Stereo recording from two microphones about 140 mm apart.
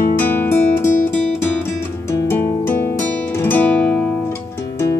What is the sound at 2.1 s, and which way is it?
Music, 20° left (ahead or behind).